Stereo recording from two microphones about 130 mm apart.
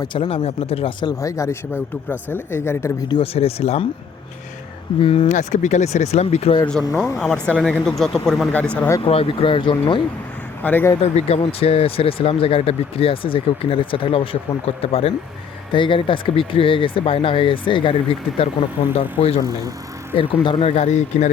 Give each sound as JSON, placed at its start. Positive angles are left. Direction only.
{"t": 0.0, "sound": "speech", "side_deg": 40}
{"t": 1.0, "sound": "speech", "side_deg": 25}
{"t": 3.1, "sound": "speech", "side_deg": 45}
{"t": 4.9, "sound": "speech", "side_deg": 45}
{"t": 5.3, "sound": "speech", "side_deg": 65}
{"t": 6.9, "sound": "speech", "side_deg": 0}
{"t": 9.0, "sound": "speech", "side_deg": 45}
{"t": 10.6, "sound": "speech", "side_deg": 15}
{"t": 11.0, "sound": "speech", "side_deg": 55}
{"t": 19.5, "sound": "speech", "side_deg": -30}
{"t": 20.1, "sound": "speech", "side_deg": 45}
{"t": 20.7, "sound": "speech", "side_deg": 60}